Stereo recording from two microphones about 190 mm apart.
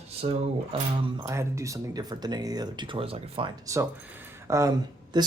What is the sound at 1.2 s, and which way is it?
Speech, 15° right (ahead or behind).